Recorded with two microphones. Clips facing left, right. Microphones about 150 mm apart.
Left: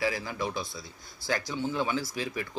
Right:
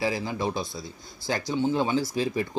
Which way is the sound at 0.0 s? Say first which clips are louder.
Right 3 dB; 25° right (ahead or behind).